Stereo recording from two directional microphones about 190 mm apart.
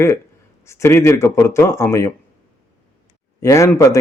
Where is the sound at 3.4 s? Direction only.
15° left (ahead or behind).